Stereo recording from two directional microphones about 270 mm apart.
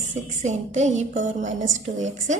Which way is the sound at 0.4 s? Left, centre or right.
Right.